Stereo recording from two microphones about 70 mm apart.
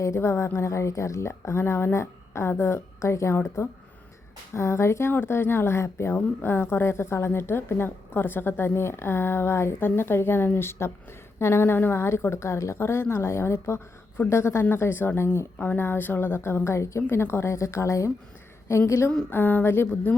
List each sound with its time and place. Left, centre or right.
0.0 s a woman's voice: left
19.3 s speech: left